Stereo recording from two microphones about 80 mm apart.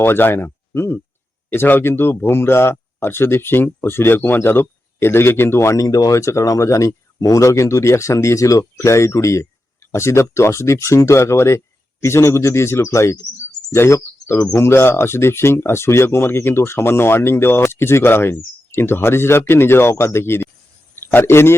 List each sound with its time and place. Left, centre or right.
0.0 s speech: left
5.8 s speech: left